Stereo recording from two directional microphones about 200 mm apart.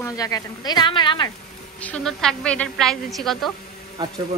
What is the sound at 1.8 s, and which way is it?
A woman's voice, 5° left (ahead or behind).